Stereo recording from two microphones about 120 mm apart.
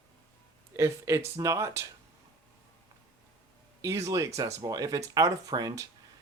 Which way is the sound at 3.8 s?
25° right (ahead or behind).